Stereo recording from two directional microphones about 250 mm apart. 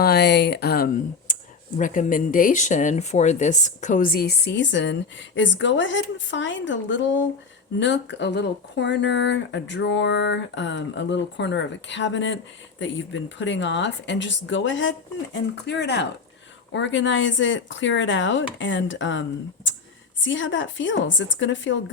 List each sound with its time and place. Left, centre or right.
0.0 s speech: left
1.3 s a sound: left
1.8 s speech: left
20.2 s speech: left